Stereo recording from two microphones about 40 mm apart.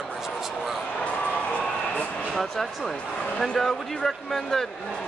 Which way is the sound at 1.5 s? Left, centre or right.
Left.